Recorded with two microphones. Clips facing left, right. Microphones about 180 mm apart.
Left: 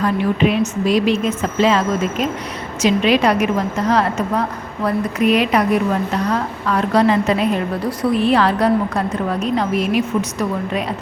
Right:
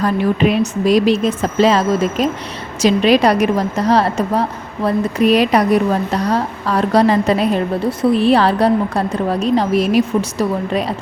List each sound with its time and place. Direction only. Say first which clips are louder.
0.0 s a woman's voice: right 2 dB; 40° right (ahead or behind)